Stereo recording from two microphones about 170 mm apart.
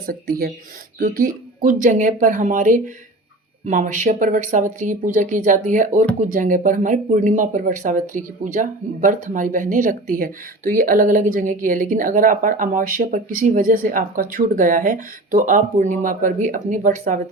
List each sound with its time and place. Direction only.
0.0 s speech: 60° right (ahead or behind)